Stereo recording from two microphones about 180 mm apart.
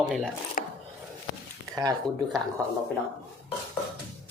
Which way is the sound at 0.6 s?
50° left (ahead or behind).